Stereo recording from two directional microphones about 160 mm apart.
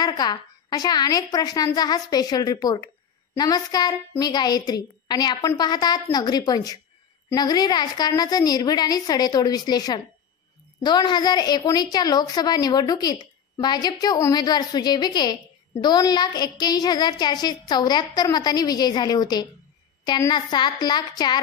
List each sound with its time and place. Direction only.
0.0 s a woman's voice: 25° left (ahead or behind)